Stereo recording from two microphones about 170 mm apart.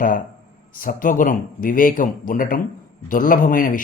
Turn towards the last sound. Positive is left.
turn(degrees=55)  # may be behind; listen again after turning